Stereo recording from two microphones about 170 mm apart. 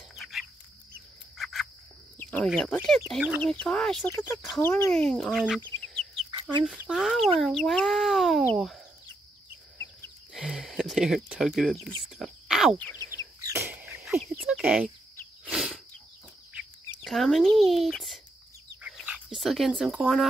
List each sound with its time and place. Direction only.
0.1 s chicken: centre (ahead or behind)
1.4 s cricket: centre (ahead or behind)
2.1 s speech: 10° left (ahead or behind)
4.6 s speech: 15° left (ahead or behind)
4.9 s speech: 5° left (ahead or behind)
10.3 s speech: centre (ahead or behind)
13.0 s bird: 20° right (ahead or behind)
15.4 s a sound: 5° right (ahead or behind)
17.0 s speech: centre (ahead or behind)
18.8 s chicken: 5° right (ahead or behind)